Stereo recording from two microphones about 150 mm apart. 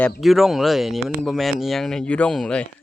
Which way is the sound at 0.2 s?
Centre (ahead or behind).